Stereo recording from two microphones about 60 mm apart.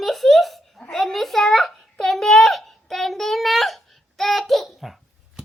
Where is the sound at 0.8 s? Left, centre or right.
Centre.